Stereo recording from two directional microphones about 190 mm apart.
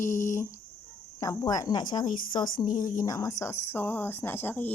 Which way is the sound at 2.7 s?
45° left (ahead or behind).